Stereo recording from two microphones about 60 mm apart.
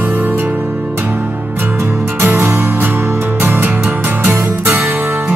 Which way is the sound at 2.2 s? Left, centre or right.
Right.